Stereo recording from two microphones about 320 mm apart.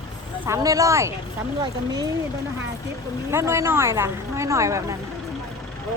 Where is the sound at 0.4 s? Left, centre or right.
Centre.